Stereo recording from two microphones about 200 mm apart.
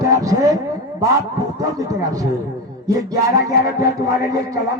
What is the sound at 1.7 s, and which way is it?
Speech, 15° right (ahead or behind).